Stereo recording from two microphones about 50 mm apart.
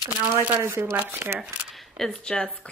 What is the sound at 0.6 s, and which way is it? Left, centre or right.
Speech, right.